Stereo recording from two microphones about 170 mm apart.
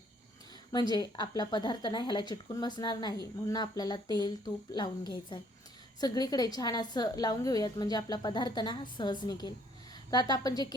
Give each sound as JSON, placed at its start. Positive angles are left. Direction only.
{"t": 0.7, "sound": "a woman's voice", "side_deg": 25}